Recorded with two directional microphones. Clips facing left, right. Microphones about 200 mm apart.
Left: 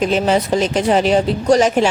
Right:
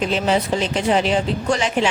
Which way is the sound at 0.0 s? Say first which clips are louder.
Left 4 dB; 45° left (ahead or behind).